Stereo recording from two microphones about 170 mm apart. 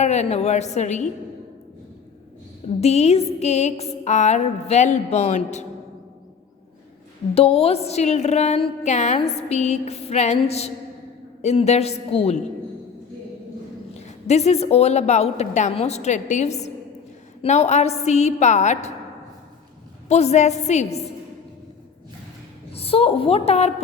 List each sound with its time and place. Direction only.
0.0 s music: 40° left (ahead or behind)
2.8 s music: 40° left (ahead or behind)
7.3 s music: 35° left (ahead or behind)
14.3 s music: 40° left (ahead or behind)
20.1 s music: 40° left (ahead or behind)
22.7 s a woman's voice: 35° left (ahead or behind)